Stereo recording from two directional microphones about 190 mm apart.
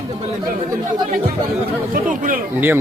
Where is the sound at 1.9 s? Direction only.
45° right (ahead or behind).